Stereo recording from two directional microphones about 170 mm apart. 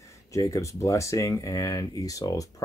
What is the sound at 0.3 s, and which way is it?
Speech, 20° left (ahead or behind).